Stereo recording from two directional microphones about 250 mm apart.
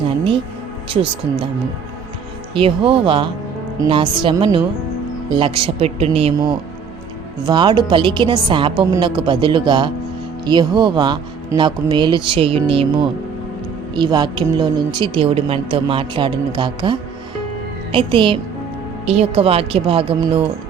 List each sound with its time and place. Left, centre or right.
2.6 s a woman's voice: right
7.4 s a woman's voice: centre